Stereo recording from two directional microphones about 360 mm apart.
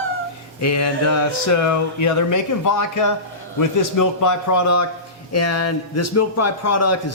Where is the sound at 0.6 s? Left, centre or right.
Left.